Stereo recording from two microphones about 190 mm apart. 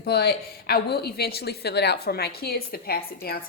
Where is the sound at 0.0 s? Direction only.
55° left (ahead or behind).